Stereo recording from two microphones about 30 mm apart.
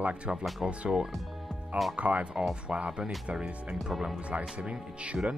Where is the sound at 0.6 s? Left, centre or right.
Right.